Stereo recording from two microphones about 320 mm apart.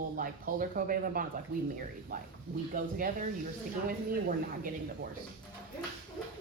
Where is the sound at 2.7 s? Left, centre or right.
Right.